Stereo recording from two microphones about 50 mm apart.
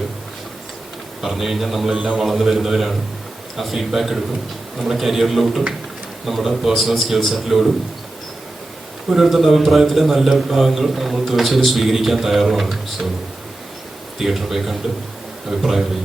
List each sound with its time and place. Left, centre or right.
1.2 s a man's voice: centre
9.1 s a man's voice: centre
14.2 s a man's voice: centre